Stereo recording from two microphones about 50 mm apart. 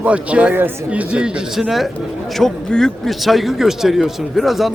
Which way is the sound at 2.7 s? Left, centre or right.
Centre.